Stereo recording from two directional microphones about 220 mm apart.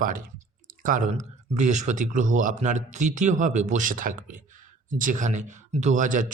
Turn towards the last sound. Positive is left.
turn(degrees=-35)  # may be behind; listen again after turning